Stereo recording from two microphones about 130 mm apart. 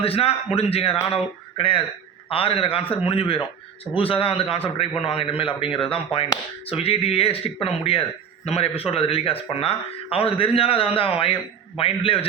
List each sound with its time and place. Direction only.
0.0 s a man's voice: 50° left (ahead or behind)